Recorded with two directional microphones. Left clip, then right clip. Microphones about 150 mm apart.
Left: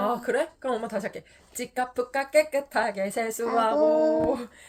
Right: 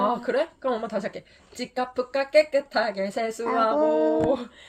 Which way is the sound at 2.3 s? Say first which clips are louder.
Right 3 dB; 50° left (ahead or behind).